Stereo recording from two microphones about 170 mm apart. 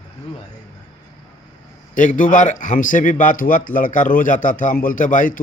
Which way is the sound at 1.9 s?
50° left (ahead or behind).